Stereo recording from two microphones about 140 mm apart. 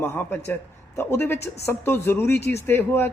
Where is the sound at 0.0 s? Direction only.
15° left (ahead or behind).